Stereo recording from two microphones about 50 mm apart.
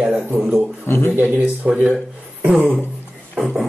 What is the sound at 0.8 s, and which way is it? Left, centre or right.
Speech, left.